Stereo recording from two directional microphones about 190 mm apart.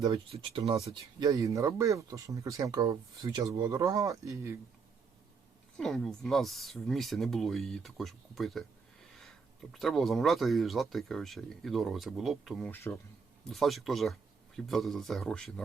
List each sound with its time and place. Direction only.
0.3 s speech: 30° right (ahead or behind)
1.2 s speech: 20° right (ahead or behind)
5.7 s speech: centre (ahead or behind)
9.7 s speech: centre (ahead or behind)
12.7 s speech: 10° left (ahead or behind)
13.5 s speech: centre (ahead or behind)